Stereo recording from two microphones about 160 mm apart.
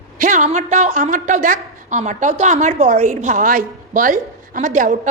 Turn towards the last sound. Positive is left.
turn(degrees=-50)  # may be behind; listen again after turning